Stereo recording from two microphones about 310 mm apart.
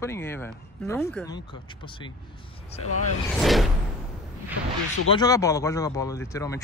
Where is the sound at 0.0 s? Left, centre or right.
Centre.